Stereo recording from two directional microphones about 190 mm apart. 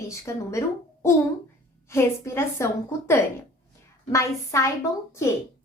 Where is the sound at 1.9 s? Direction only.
15° left (ahead or behind).